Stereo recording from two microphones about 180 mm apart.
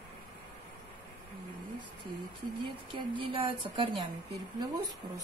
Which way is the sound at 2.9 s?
30° right (ahead or behind).